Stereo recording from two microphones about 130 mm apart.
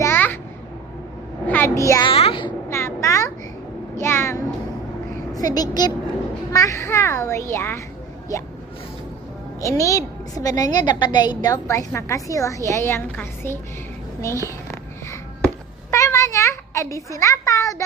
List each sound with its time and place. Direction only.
0.0 s babbling: 15° left (ahead or behind)
1.5 s a child's voice: 15° left (ahead or behind)
2.0 s a sound: 45° left (ahead or behind)
2.6 s a sound: 20° left (ahead or behind)
5.3 s a woman's voice: 30° left (ahead or behind)
9.6 s a woman's voice: 25° left (ahead or behind)
15.9 s a child's voice: 25° left (ahead or behind)